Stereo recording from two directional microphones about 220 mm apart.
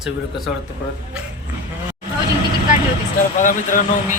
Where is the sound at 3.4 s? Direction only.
35° left (ahead or behind).